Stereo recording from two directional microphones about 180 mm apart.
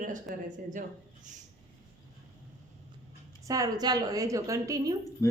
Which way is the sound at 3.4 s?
20° right (ahead or behind).